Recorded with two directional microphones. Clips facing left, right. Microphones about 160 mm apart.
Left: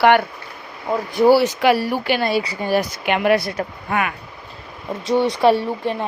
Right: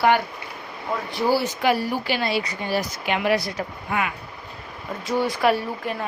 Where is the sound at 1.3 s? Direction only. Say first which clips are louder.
Left 6 dB; 75° left (ahead or behind); by 4.1 s 60° left (ahead or behind).